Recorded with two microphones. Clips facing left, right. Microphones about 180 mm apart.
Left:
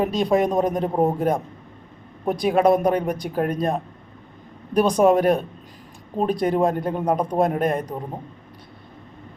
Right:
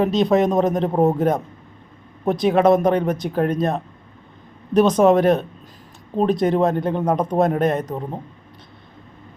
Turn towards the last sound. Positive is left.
turn(degrees=10)  # may be behind; listen again after turning